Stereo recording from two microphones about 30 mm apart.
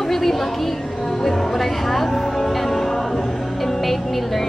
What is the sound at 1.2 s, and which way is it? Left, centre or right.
Speech, centre.